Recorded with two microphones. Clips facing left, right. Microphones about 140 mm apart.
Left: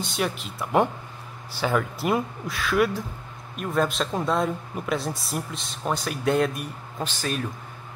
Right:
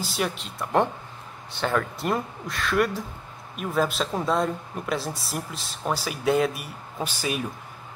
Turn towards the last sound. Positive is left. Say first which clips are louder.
# even
turn(degrees=-10)  # may be behind; listen again after turning